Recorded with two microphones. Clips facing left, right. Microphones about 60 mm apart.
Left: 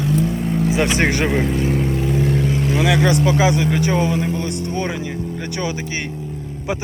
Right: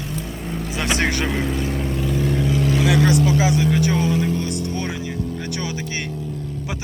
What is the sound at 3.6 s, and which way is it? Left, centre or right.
Vehicle, left.